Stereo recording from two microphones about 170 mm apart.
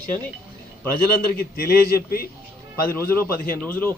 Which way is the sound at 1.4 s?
60° left (ahead or behind).